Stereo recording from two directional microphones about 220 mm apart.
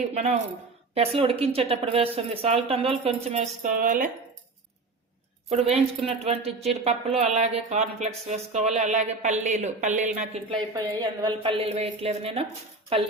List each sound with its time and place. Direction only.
0.1 s a woman's voice: 30° right (ahead or behind)
5.5 s a woman's voice: 30° right (ahead or behind)
11.0 s a woman's voice: 20° right (ahead or behind)